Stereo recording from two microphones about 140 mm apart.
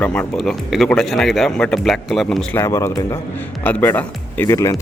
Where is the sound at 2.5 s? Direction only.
20° left (ahead or behind).